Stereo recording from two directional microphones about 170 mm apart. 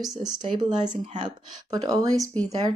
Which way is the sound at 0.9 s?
45° right (ahead or behind).